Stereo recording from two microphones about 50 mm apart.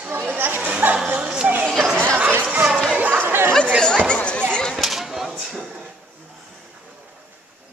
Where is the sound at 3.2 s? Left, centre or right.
Right.